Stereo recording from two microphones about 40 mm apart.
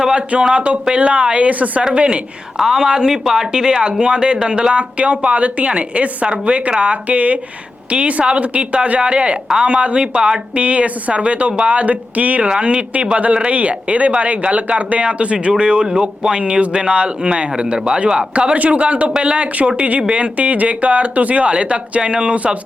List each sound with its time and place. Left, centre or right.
0.0 s speech: right
0.5 s speech: right
2.6 s speech: centre
18.3 s speech: right